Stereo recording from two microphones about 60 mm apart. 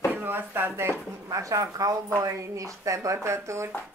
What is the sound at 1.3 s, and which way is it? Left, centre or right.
Speech, right.